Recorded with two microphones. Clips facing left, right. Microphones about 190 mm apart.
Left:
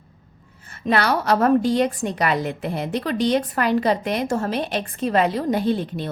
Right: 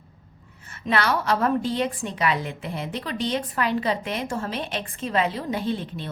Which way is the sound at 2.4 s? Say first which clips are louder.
Left 6 dB; 60° left (ahead or behind).